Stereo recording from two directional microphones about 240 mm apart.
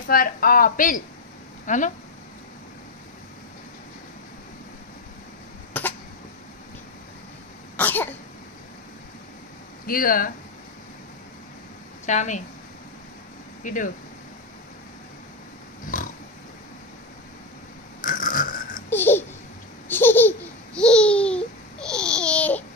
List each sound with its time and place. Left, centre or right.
0.0 s a woman's voice: left
5.7 s cough: centre
7.7 s cough: centre
9.8 s a woman's voice: left
12.1 s a woman's voice: left
13.7 s a woman's voice: left
15.8 s pig: left
18.0 s a sound: left
18.9 s babbling: centre
19.9 s laughter: centre